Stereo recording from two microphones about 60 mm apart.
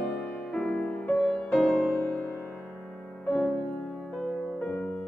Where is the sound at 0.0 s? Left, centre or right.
Centre.